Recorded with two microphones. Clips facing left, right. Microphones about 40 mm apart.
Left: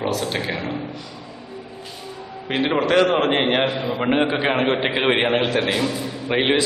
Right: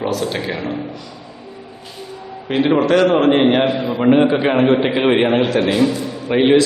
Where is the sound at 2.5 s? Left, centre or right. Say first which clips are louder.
Right 5 dB; centre.